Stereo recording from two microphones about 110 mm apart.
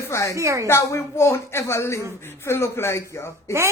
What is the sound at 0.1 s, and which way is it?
Speech, 30° left (ahead or behind).